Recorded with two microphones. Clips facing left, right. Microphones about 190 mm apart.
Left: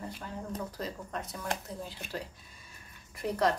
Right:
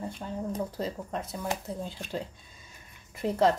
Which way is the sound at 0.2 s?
25° right (ahead or behind).